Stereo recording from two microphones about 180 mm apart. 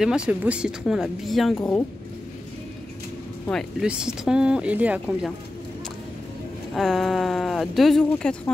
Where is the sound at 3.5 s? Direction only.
Centre (ahead or behind).